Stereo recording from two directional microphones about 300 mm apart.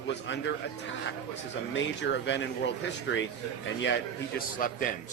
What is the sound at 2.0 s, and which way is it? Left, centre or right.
Speech, left.